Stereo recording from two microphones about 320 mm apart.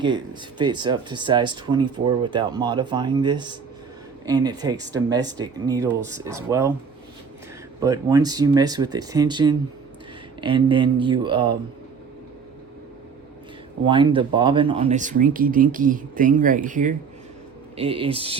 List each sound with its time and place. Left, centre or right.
0.6 s speech: centre
7.8 s speech: centre
13.8 s speech: centre